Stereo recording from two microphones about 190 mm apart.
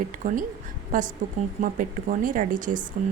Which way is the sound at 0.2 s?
45° right (ahead or behind).